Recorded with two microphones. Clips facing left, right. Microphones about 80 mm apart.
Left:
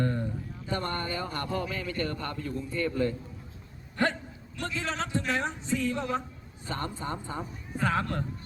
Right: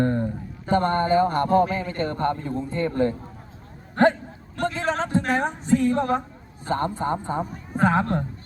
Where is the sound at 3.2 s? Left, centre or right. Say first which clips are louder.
Right 4 dB; right.